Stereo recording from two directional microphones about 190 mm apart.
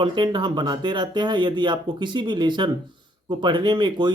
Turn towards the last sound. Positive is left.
turn(degrees=-25)  # may be behind; listen again after turning